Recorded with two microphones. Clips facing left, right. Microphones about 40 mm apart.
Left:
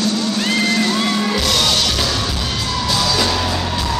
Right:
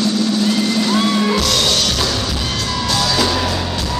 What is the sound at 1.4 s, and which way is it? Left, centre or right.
Music, centre.